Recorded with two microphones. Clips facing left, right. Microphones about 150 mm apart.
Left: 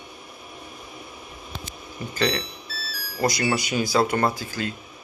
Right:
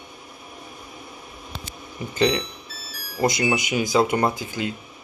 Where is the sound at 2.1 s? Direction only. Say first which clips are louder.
Right 4 dB; 20° right (ahead or behind).